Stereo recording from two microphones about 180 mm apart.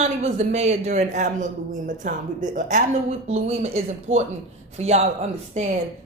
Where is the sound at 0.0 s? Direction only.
35° right (ahead or behind).